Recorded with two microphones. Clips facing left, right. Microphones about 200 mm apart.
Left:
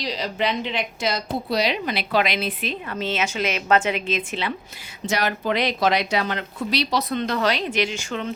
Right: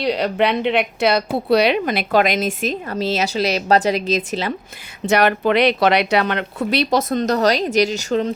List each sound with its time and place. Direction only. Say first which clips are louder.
0.0 s a woman's voice: right 7 dB; 60° right (ahead or behind); by 4.5 s 40° right (ahead or behind)
5.0 s speech: right 7 dB; 60° right (ahead or behind); by 8.3 s 40° right (ahead or behind)